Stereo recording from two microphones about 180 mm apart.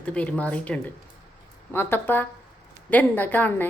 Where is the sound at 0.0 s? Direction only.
5° left (ahead or behind).